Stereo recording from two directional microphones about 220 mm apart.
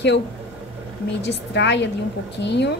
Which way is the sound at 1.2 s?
50° left (ahead or behind).